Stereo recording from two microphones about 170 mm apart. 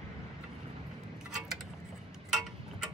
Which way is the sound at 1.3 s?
Centre (ahead or behind).